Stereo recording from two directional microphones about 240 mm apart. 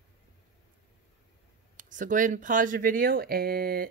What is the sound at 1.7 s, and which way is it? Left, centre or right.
Speech, right.